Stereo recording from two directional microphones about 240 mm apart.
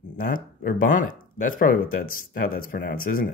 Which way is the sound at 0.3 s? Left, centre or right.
Left.